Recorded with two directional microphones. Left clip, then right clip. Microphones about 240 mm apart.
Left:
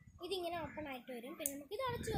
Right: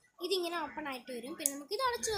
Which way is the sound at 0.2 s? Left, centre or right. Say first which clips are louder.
Right 7 dB; right.